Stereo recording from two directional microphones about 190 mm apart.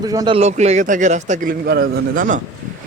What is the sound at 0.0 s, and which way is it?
Speech, 20° right (ahead or behind).